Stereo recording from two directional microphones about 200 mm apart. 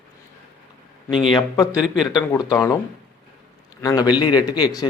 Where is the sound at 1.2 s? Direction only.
25° left (ahead or behind).